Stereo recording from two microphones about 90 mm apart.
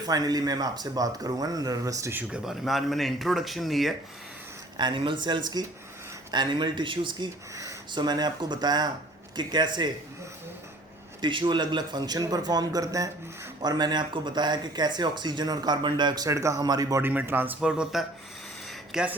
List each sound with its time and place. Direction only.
0.0 s speech: 45° right (ahead or behind)
2.3 s speech: 5° right (ahead or behind)
4.8 s speech: 65° right (ahead or behind)
7.5 s a sound: 35° right (ahead or behind)
7.9 s speech: 50° right (ahead or behind)
11.2 s speech: 65° right (ahead or behind); by 13.1 s 40° right (ahead or behind)
13.6 s speech: 50° right (ahead or behind)
16.3 s speech: 35° right (ahead or behind)
17.0 s speech: 20° right (ahead or behind)
17.6 s speech: 10° right (ahead or behind)